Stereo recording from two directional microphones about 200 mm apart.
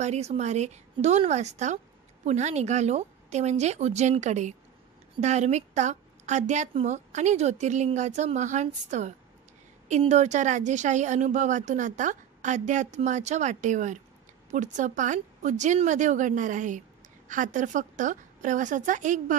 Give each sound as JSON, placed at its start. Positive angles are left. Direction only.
{"t": 0.0, "sound": "a woman's voice", "side_deg": -35}